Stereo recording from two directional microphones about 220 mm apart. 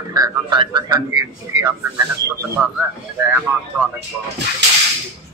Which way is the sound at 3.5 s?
10° right (ahead or behind).